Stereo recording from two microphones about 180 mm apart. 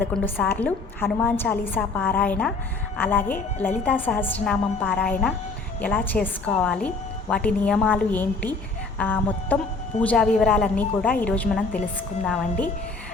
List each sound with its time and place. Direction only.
0.0 s a woman's voice: 10° left (ahead or behind)